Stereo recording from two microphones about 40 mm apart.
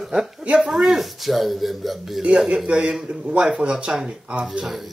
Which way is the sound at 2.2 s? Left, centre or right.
Right.